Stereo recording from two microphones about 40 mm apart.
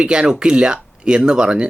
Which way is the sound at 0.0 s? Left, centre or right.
Right.